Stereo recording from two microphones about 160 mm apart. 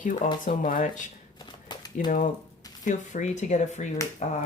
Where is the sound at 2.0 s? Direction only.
55° left (ahead or behind).